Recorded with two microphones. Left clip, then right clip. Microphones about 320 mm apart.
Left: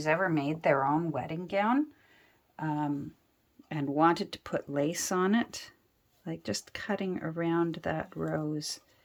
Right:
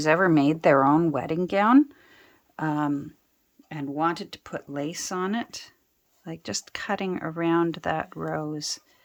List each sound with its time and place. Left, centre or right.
0.0 s speech: centre
3.7 s speech: centre